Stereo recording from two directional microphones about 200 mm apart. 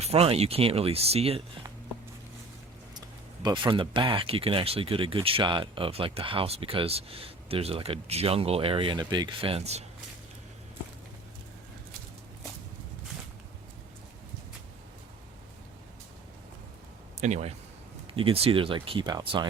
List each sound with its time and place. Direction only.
0.0 s speech: 30° right (ahead or behind)
3.4 s speech: 25° right (ahead or behind)
17.2 s speech: 35° right (ahead or behind)